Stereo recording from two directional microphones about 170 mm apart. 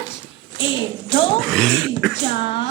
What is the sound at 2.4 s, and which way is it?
Speech, 35° left (ahead or behind).